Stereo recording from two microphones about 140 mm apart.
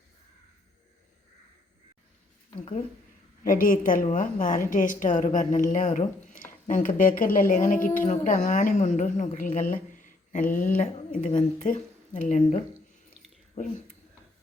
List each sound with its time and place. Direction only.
3.4 s a woman's voice: 80° left